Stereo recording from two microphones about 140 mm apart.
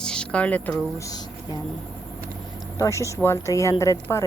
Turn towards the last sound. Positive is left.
turn(degrees=20)  # may be behind; listen again after turning